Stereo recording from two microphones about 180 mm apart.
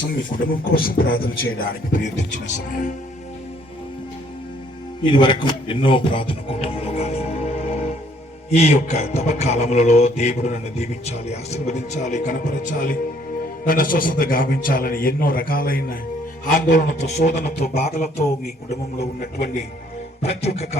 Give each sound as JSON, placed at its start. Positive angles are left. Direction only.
{"t": 0.3, "sound": "a man's voice", "side_deg": 55}
{"t": 5.0, "sound": "music", "side_deg": 25}
{"t": 13.7, "sound": "a man's voice", "side_deg": 50}
{"t": 16.5, "sound": "music", "side_deg": 45}
{"t": 18.7, "sound": "a man's voice", "side_deg": 55}
{"t": 20.2, "sound": "music", "side_deg": 35}